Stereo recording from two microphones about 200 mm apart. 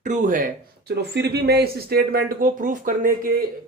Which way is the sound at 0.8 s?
55° right (ahead or behind).